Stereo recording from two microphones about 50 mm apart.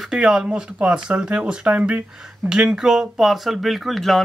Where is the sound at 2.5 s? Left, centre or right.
Centre.